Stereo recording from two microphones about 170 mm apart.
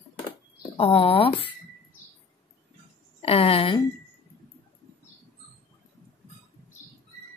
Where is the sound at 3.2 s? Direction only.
35° left (ahead or behind).